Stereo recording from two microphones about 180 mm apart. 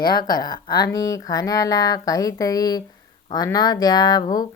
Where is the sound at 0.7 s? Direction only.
65° left (ahead or behind).